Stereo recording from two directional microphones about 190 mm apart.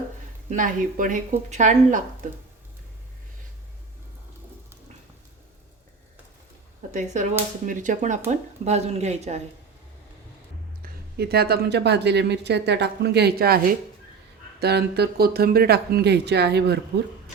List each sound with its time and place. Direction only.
0.5 s a woman's voice: 45° right (ahead or behind)
6.9 s speech: 40° right (ahead or behind)
10.8 s speech: 55° right (ahead or behind)